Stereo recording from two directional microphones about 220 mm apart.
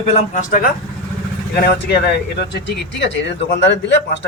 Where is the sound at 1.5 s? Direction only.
50° left (ahead or behind).